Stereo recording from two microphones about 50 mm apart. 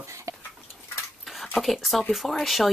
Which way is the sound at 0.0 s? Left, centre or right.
Right.